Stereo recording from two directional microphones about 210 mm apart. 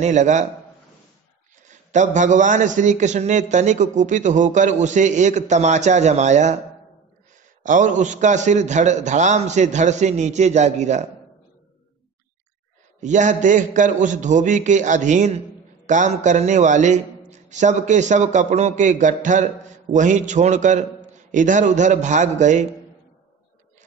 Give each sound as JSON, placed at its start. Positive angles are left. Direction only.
{"t": 0.0, "sound": "a man's voice", "side_deg": -35}
{"t": 1.7, "sound": "a man's voice", "side_deg": -35}
{"t": 7.6, "sound": "a man's voice", "side_deg": -35}
{"t": 13.0, "sound": "a man's voice", "side_deg": -35}